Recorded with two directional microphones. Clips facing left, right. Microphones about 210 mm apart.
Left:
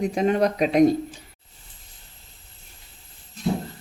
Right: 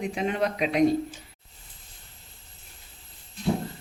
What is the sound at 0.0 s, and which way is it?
Speech, 40° left (ahead or behind).